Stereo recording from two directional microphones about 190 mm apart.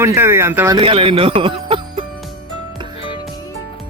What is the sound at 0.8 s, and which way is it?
Music, 30° right (ahead or behind).